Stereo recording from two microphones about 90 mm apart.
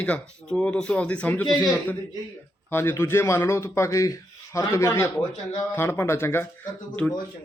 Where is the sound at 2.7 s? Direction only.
25° left (ahead or behind).